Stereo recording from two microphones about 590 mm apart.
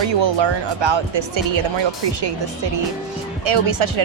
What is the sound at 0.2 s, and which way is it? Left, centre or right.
A woman's voice, right.